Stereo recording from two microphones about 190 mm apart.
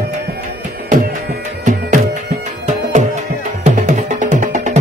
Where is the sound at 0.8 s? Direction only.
45° right (ahead or behind).